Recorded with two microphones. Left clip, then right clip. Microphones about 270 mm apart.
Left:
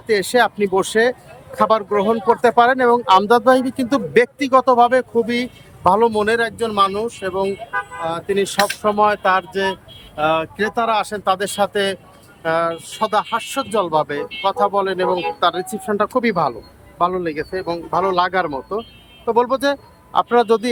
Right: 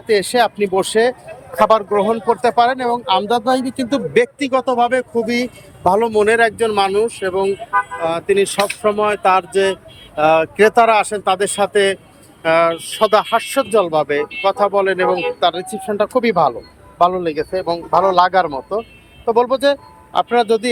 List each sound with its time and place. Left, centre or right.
0.1 s speech: centre